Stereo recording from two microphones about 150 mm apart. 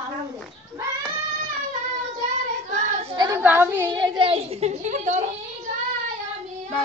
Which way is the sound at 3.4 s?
15° right (ahead or behind).